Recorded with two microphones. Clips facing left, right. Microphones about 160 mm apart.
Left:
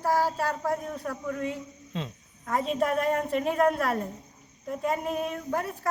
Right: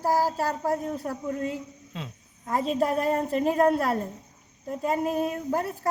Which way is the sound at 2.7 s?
30° right (ahead or behind).